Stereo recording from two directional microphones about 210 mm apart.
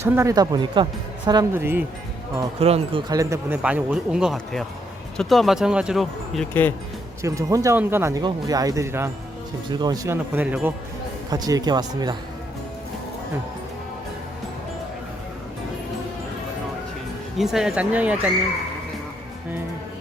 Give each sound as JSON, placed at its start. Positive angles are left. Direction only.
{"t": 0.0, "sound": "speech", "side_deg": -10}
{"t": 2.6, "sound": "speech", "side_deg": -30}
{"t": 3.1, "sound": "speech", "side_deg": -15}
{"t": 7.2, "sound": "speech", "side_deg": -15}
{"t": 17.3, "sound": "speech", "side_deg": 0}